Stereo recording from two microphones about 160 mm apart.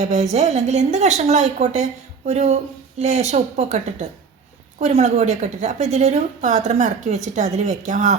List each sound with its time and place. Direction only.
0.0 s a woman's voice: 45° right (ahead or behind)
4.8 s a woman's voice: 45° right (ahead or behind)